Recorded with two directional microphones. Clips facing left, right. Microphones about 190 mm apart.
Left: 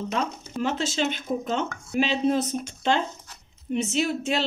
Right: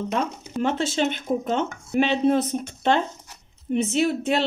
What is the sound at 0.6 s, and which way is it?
Speech, 55° right (ahead or behind).